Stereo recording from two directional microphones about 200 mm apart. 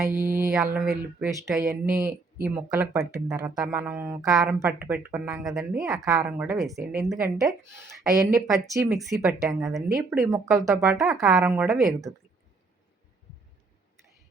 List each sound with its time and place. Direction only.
0.0 s speech: 15° right (ahead or behind)
0.5 s speech: 5° right (ahead or behind)
1.5 s speech: 15° right (ahead or behind)
8.1 s speech: 15° right (ahead or behind)
8.9 s speech: centre (ahead or behind)
10.2 s speech: 15° right (ahead or behind)
10.9 s speech: centre (ahead or behind)